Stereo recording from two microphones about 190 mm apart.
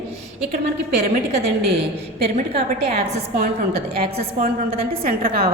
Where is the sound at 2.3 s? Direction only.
30° right (ahead or behind).